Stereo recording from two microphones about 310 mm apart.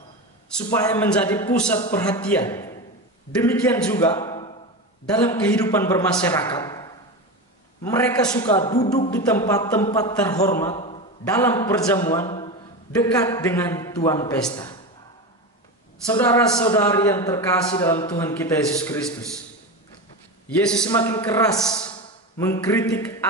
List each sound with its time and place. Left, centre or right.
0.8 s a man's voice: centre
10.8 s a sound: centre
11.3 s a man's voice: centre
16.1 s a man's voice: centre
20.4 s a man's voice: centre